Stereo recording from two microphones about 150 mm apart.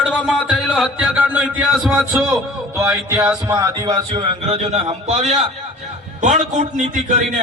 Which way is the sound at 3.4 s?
20° right (ahead or behind).